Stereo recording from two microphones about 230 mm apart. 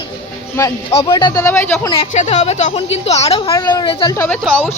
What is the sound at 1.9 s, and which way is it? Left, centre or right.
A woman's voice, left.